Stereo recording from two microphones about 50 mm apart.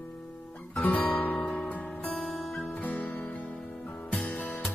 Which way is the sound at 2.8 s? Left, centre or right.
Left.